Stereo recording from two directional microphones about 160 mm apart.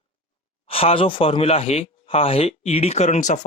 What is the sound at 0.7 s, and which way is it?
Speech, 35° left (ahead or behind).